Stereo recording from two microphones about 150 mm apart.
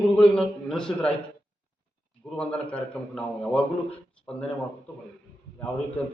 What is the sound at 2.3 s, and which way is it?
A man's voice, 5° left (ahead or behind).